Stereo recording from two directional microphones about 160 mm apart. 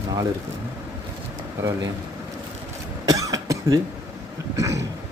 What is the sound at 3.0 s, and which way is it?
Cough, 20° right (ahead or behind).